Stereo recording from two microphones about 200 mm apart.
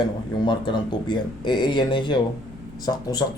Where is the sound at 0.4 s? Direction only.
25° left (ahead or behind).